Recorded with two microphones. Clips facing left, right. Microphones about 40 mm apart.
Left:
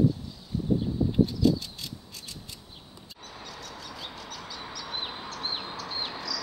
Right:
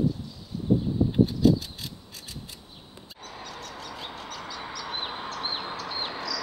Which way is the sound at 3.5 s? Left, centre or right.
Right.